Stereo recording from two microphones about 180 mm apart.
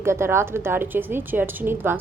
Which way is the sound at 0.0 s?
15° right (ahead or behind).